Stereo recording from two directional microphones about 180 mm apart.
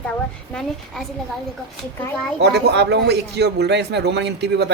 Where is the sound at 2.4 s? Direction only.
70° right (ahead or behind).